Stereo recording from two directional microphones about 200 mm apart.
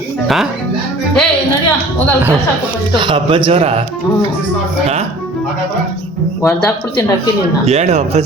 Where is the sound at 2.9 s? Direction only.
25° right (ahead or behind).